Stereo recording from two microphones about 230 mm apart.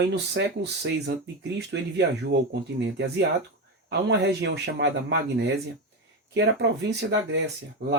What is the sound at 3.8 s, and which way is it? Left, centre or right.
Speech, right.